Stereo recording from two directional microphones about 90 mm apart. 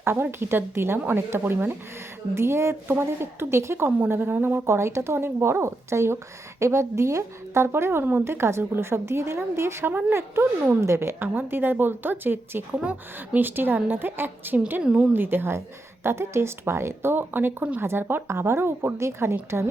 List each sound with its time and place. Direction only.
0.0 s speech: 25° right (ahead or behind)
14.8 s speech: 10° right (ahead or behind); by 19.6 s 30° right (ahead or behind)